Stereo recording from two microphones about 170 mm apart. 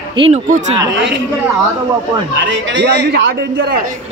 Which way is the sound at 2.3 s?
90° right.